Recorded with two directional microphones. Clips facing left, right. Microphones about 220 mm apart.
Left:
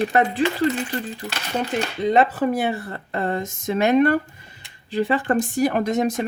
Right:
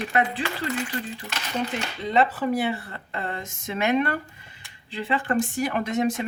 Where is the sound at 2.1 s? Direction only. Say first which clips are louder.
Left 3 dB; 45° left (ahead or behind).